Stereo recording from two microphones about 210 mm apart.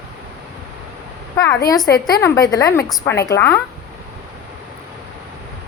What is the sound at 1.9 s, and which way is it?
A woman's voice, 15° left (ahead or behind).